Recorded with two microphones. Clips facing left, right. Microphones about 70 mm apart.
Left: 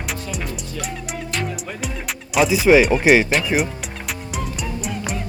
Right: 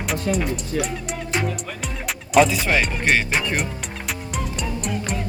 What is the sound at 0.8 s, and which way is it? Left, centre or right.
Music, centre.